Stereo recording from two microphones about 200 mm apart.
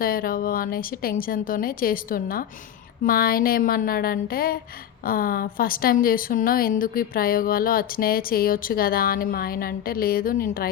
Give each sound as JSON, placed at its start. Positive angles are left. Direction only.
{"t": 0.0, "sound": "speech", "side_deg": 45}